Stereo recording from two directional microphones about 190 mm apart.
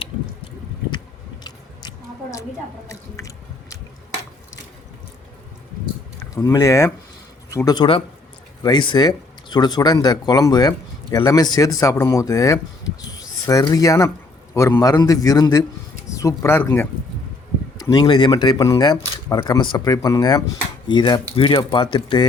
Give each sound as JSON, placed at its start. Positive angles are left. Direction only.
{"t": 2.8, "sound": "music", "side_deg": 15}
{"t": 6.3, "sound": "a man's voice", "side_deg": 20}